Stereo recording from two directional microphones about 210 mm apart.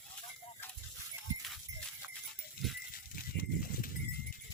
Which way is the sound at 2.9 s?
45° left (ahead or behind).